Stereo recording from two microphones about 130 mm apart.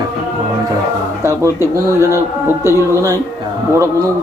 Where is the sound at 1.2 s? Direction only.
20° right (ahead or behind).